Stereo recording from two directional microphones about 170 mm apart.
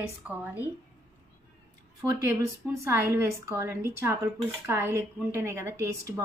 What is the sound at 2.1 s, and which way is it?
A woman's voice, 20° right (ahead or behind).